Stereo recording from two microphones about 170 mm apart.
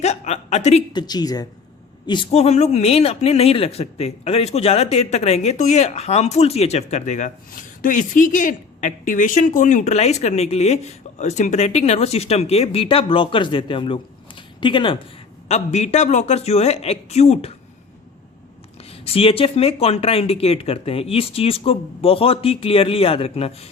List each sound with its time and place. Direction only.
0.0 s chuckle: 40° left (ahead or behind)
0.9 s speech: 25° left (ahead or behind)
2.3 s speech: 40° left (ahead or behind)
15.4 s speech: 40° left (ahead or behind)
18.9 s speech: 35° left (ahead or behind)